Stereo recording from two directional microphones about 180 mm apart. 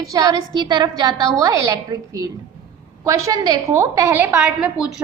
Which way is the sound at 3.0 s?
15° right (ahead or behind).